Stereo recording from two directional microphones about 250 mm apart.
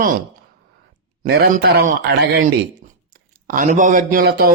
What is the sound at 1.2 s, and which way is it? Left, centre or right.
A man's voice, right.